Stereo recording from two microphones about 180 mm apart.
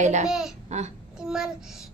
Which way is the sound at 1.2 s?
5° right (ahead or behind).